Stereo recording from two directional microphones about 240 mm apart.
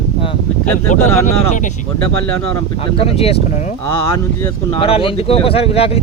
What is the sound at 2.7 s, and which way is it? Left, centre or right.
Speech, left.